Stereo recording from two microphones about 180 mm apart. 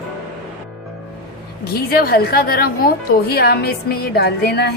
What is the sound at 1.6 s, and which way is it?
A woman's voice, 55° left (ahead or behind).